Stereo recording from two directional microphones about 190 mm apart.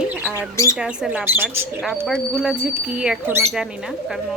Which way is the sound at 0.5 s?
15° left (ahead or behind).